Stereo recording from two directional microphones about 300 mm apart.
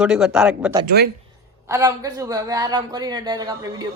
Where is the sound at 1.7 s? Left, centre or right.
Centre.